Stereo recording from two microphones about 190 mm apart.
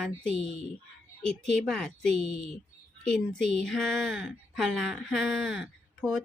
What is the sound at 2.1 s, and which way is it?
Speech, 35° right (ahead or behind).